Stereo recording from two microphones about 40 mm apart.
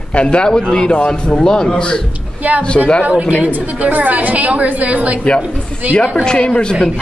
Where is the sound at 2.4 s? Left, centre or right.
Right.